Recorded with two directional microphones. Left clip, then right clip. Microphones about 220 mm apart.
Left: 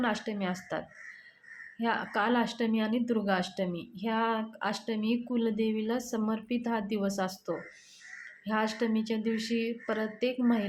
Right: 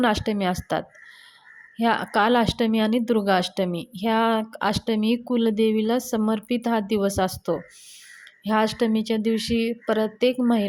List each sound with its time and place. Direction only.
0.0 s speech: 40° right (ahead or behind)